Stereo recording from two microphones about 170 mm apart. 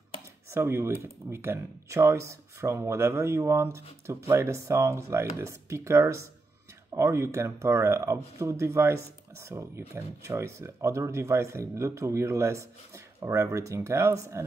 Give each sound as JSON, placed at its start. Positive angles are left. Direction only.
{"t": 0.5, "sound": "speech", "side_deg": -15}